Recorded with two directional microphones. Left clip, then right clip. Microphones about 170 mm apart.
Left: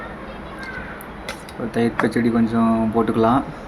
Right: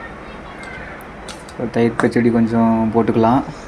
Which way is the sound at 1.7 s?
10° right (ahead or behind).